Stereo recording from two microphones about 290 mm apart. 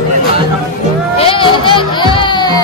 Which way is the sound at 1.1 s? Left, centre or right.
Centre.